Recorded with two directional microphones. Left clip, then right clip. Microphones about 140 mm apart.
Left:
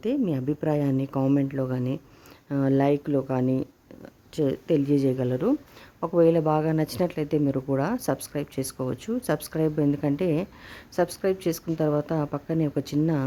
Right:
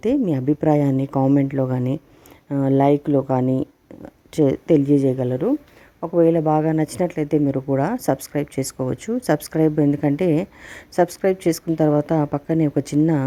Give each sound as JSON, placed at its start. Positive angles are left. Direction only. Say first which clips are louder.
{"t": 0.3, "sound": "a woman's voice", "louder": "right 8 dB", "side_deg": -30}
{"t": 2.5, "sound": "speech", "louder": "right 6 dB", "side_deg": -15}
{"t": 4.9, "sound": "a woman's voice", "louder": "right 5 dB", "side_deg": -20}